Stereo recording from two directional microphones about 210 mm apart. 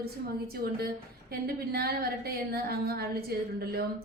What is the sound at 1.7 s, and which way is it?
A woman's voice, 45° right (ahead or behind).